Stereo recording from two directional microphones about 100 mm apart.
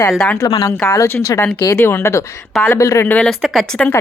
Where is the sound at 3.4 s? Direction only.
Centre (ahead or behind).